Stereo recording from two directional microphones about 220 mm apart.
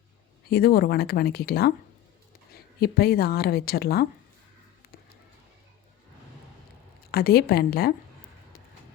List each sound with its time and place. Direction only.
0.5 s a woman's voice: 45° left (ahead or behind)
7.1 s speech: 45° left (ahead or behind)